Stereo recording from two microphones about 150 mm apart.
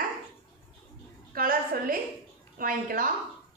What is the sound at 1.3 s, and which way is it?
A woman's voice, 75° right (ahead or behind).